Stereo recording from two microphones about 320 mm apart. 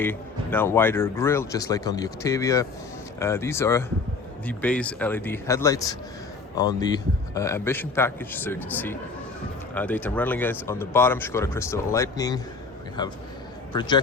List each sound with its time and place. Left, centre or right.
0.0 s speech: centre